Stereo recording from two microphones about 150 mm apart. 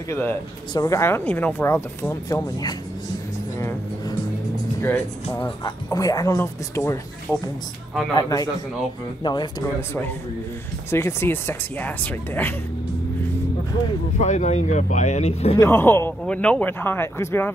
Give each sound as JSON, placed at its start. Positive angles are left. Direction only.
{"t": 0.1, "sound": "speech", "side_deg": 15}
{"t": 5.3, "sound": "speech", "side_deg": 20}
{"t": 8.2, "sound": "speech", "side_deg": 25}
{"t": 9.8, "sound": "speech", "side_deg": 15}
{"t": 14.1, "sound": "speech", "side_deg": 55}
{"t": 15.6, "sound": "speech", "side_deg": 15}